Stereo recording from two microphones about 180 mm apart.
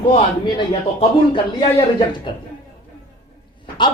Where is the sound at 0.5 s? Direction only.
25° left (ahead or behind).